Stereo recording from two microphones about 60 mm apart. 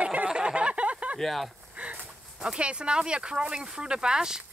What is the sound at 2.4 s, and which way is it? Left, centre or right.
Speech, centre.